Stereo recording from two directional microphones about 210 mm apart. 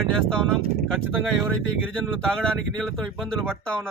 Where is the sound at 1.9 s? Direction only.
5° left (ahead or behind).